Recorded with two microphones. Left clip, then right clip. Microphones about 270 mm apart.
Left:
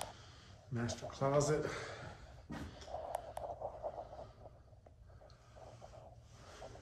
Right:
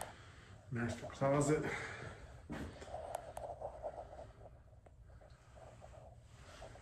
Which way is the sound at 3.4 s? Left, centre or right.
Right.